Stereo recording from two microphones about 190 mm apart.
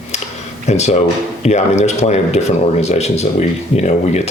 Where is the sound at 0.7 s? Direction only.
35° left (ahead or behind).